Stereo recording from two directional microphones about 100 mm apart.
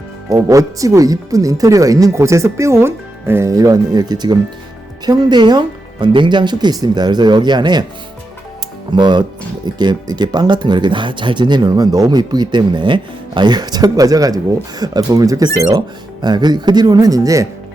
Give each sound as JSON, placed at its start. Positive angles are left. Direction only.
{"t": 0.3, "sound": "speech", "side_deg": -35}
{"t": 8.9, "sound": "speech", "side_deg": -50}